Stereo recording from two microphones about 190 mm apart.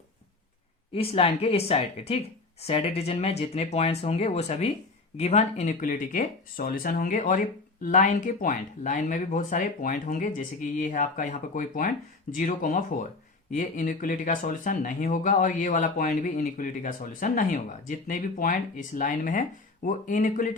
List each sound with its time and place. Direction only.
0.9 s speech: 30° left (ahead or behind)